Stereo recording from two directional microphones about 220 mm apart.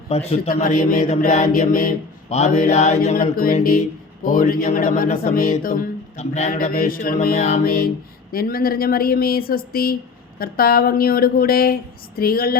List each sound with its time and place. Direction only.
0.1 s a man's voice: 30° left (ahead or behind)